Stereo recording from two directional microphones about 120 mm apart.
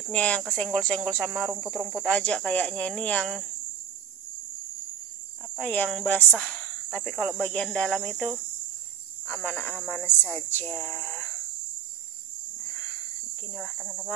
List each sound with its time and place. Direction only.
0.1 s speech: 10° left (ahead or behind)
5.6 s speech: 15° left (ahead or behind)
12.6 s a sound: 10° left (ahead or behind)
13.6 s speech: centre (ahead or behind)